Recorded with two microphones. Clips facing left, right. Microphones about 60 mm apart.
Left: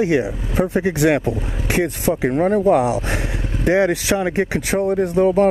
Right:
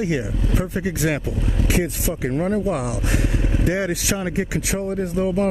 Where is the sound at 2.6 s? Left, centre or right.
Left.